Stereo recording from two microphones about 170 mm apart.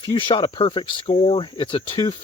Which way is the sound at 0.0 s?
25° left (ahead or behind).